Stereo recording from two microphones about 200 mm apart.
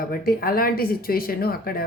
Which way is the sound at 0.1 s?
50° left (ahead or behind).